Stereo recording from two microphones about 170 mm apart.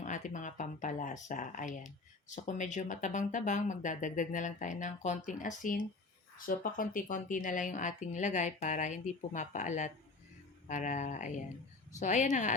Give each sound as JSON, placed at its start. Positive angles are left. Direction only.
{"t": 0.0, "sound": "speech", "side_deg": 45}